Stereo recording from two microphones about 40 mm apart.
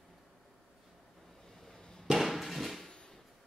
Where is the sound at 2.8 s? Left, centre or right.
Left.